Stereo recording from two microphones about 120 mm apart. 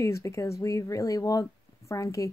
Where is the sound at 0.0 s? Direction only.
25° left (ahead or behind).